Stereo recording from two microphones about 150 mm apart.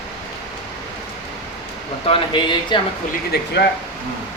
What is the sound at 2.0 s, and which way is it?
Speech, 35° left (ahead or behind).